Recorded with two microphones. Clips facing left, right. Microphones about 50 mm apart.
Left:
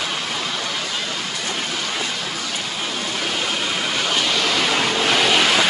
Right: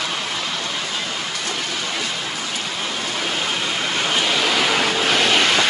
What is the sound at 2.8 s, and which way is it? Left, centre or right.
Vehicle, centre.